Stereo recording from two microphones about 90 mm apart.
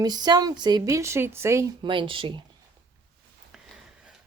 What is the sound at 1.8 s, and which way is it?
Speech, 70° right (ahead or behind).